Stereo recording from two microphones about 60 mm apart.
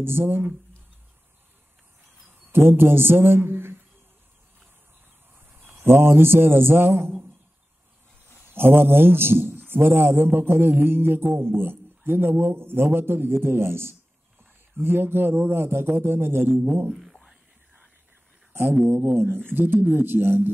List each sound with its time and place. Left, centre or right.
0.0 s mantra: right
2.2 s a man's voice: right
5.3 s a man's voice: right
8.5 s mantra: right
16.9 s a sound: centre
18.5 s speech: right
19.1 s mantra: right